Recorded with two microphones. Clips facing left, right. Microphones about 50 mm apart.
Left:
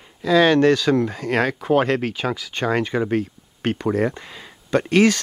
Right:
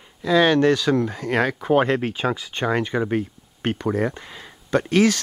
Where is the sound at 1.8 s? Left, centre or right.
Centre.